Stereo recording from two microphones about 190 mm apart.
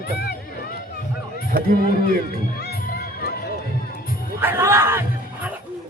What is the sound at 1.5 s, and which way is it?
Speech, 50° right (ahead or behind).